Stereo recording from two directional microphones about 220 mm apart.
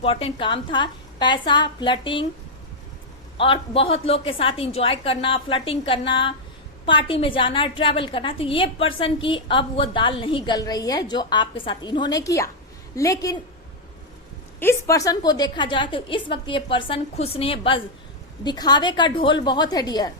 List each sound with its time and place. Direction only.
0.0 s a woman's voice: 25° left (ahead or behind)
3.3 s a woman's voice: 25° left (ahead or behind)
14.6 s a woman's voice: 10° left (ahead or behind)